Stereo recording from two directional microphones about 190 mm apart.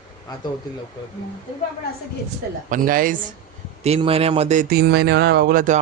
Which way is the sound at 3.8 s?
30° right (ahead or behind).